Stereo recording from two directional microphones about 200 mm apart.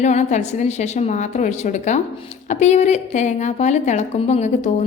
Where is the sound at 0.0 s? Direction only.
35° left (ahead or behind).